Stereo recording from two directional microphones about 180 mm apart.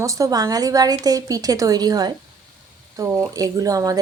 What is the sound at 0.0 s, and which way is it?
Speech, 15° right (ahead or behind).